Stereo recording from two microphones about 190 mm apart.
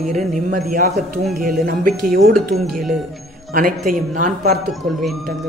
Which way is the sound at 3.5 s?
45° right (ahead or behind).